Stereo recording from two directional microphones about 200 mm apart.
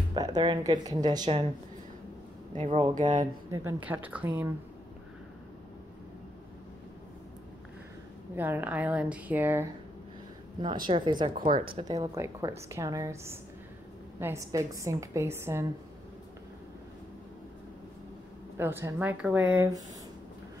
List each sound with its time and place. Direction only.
0.1 s a woman's voice: 20° right (ahead or behind)
1.2 s a woman's voice: 30° right (ahead or behind)
2.5 s speech: 35° right (ahead or behind)
3.5 s a woman's voice: 10° right (ahead or behind)
8.4 s a woman's voice: 10° right (ahead or behind)
10.6 s a woman's voice: 25° right (ahead or behind)
11.3 s speech: 45° right (ahead or behind)
11.7 s a woman's voice: 20° right (ahead or behind)
18.6 s a woman's voice: 10° right (ahead or behind)